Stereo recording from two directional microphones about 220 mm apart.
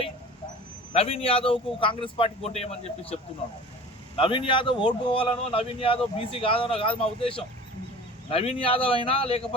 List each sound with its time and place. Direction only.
0.9 s speech: 25° left (ahead or behind)